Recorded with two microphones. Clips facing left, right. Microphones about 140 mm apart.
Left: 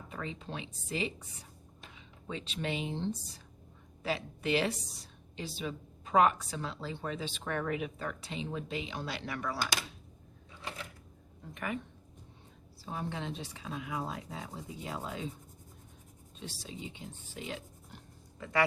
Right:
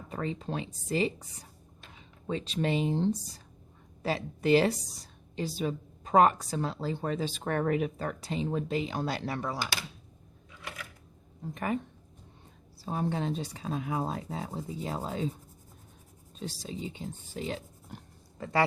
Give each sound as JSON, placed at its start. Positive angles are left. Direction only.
{"t": 0.1, "sound": "a woman's voice", "side_deg": -40}
{"t": 10.6, "sound": "a sound", "side_deg": 30}
{"t": 11.5, "sound": "a woman's voice", "side_deg": -40}
{"t": 12.8, "sound": "a woman's voice", "side_deg": -40}
{"t": 16.4, "sound": "speech", "side_deg": -40}